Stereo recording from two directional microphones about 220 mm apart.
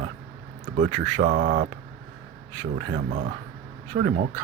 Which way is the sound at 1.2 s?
45° right (ahead or behind).